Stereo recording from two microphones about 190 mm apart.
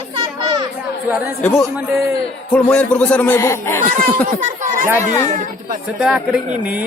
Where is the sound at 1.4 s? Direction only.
5° left (ahead or behind).